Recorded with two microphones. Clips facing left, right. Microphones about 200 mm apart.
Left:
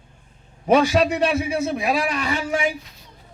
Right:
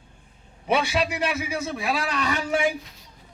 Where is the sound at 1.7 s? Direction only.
15° left (ahead or behind).